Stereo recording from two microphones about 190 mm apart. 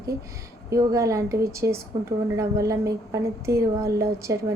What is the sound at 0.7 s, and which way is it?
A woman's voice, 20° right (ahead or behind).